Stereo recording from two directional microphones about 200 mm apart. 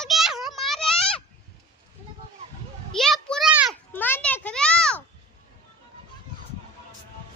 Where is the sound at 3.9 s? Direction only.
10° left (ahead or behind).